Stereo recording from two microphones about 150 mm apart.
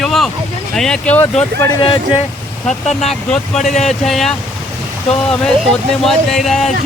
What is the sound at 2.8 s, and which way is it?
Speech, 45° left (ahead or behind).